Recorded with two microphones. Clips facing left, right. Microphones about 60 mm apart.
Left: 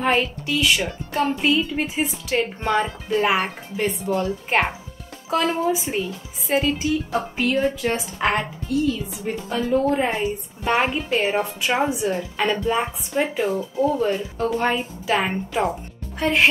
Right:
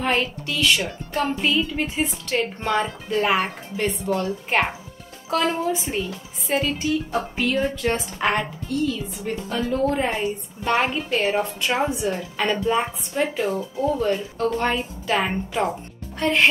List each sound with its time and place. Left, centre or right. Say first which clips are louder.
0.0 s a woman's voice: left 2 dB; centre